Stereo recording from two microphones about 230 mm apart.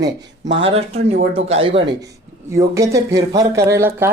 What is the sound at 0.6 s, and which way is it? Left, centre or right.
Speech, right.